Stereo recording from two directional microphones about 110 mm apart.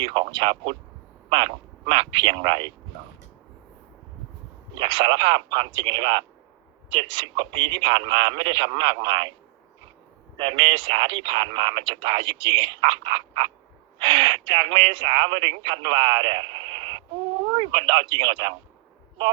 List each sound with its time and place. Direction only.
0.0 s speech: 45° right (ahead or behind)
4.8 s speech: 45° right (ahead or behind)
10.3 s speech: 45° right (ahead or behind)